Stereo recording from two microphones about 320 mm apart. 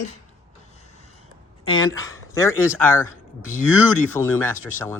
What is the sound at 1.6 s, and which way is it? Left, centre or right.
Speech, centre.